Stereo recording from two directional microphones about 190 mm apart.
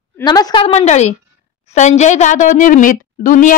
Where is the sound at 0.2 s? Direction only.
20° left (ahead or behind).